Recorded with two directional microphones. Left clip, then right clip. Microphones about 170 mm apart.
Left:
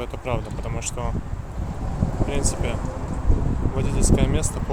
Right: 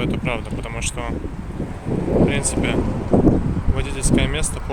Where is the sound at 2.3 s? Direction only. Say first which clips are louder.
Right 5 dB; centre (ahead or behind).